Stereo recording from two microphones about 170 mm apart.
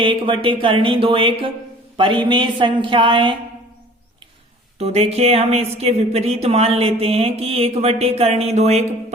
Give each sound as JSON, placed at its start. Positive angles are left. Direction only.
{"t": 0.0, "sound": "speech", "side_deg": -30}
{"t": 4.8, "sound": "speech", "side_deg": -40}